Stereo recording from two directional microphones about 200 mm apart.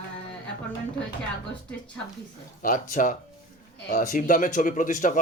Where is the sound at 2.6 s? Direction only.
40° left (ahead or behind).